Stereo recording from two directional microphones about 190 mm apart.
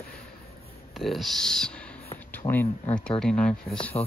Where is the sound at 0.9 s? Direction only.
Centre (ahead or behind).